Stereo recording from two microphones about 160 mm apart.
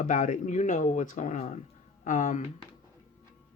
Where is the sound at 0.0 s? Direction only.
55° left (ahead or behind).